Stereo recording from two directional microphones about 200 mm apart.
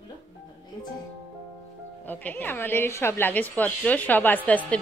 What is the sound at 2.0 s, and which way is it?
A woman's voice, 10° left (ahead or behind).